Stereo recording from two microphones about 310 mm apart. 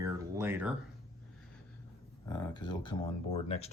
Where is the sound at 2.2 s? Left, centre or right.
Centre.